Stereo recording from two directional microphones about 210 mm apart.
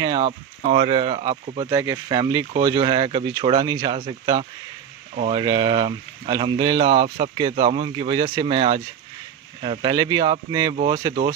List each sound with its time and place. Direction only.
0.0 s speech: 20° right (ahead or behind)
5.4 s speech: 20° right (ahead or behind)